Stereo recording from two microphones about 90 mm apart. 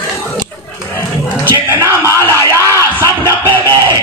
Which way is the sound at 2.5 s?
35° right (ahead or behind).